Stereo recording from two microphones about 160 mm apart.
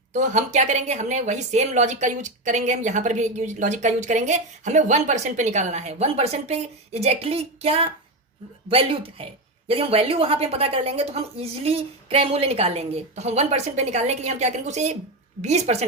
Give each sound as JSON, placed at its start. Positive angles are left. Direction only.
{"t": 0.1, "sound": "a woman's voice", "side_deg": -50}